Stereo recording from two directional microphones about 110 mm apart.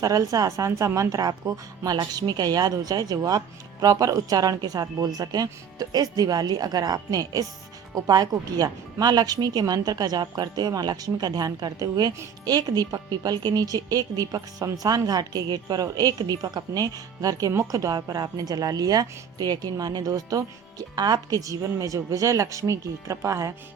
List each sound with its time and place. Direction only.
0.0 s a woman's voice: 35° right (ahead or behind)